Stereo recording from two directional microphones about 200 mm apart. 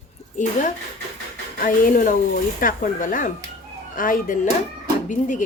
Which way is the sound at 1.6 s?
40° left (ahead or behind).